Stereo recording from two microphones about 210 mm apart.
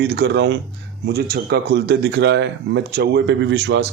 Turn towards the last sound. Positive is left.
turn(degrees=-55)  # may be behind; listen again after turning